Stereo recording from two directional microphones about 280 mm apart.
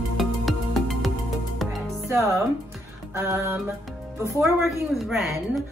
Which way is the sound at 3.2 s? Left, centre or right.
Centre.